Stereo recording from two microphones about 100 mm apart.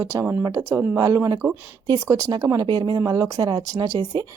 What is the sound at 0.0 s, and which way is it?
Speech, 30° right (ahead or behind).